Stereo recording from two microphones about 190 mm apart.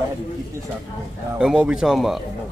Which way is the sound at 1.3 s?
5° right (ahead or behind).